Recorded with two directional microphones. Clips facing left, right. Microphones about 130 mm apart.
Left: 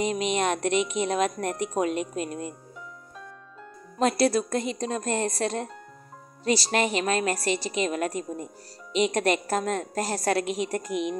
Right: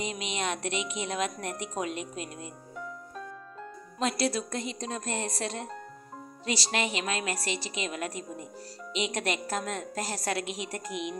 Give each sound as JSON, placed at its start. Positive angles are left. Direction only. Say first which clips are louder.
{"t": 0.0, "sound": "a woman's voice", "louder": "left 8 dB", "side_deg": 50}
{"t": 4.0, "sound": "a woman's voice", "louder": "left 7 dB", "side_deg": 50}